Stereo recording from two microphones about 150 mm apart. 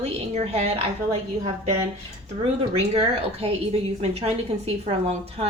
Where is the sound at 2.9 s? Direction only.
40° right (ahead or behind).